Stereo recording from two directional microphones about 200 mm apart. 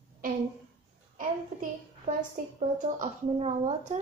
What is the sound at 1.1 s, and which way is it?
A child's voice, 40° right (ahead or behind).